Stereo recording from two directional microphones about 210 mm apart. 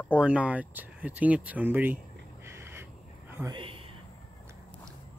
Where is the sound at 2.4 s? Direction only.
10° right (ahead or behind).